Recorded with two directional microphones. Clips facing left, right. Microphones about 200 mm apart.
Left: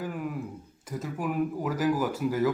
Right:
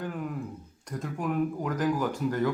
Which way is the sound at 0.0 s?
5° left (ahead or behind).